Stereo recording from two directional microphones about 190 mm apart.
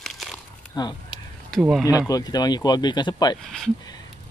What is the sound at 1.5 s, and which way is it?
Speech, centre (ahead or behind).